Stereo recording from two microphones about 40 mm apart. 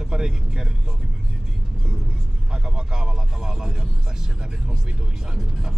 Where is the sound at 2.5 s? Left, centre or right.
Centre.